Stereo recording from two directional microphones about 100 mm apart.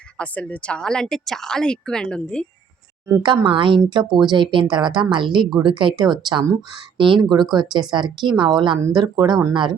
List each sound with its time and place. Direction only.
0.2 s a woman's voice: 15° left (ahead or behind)
3.2 s speech: 55° right (ahead or behind)
7.2 s speech: 45° right (ahead or behind)